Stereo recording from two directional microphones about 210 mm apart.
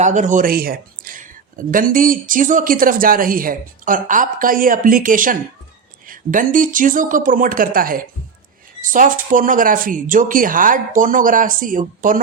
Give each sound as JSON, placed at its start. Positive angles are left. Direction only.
{"t": 0.0, "sound": "speech", "side_deg": -35}